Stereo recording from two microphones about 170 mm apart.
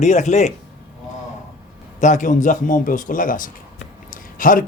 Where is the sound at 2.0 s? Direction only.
45° left (ahead or behind).